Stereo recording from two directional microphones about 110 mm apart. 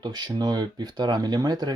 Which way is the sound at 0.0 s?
40° right (ahead or behind).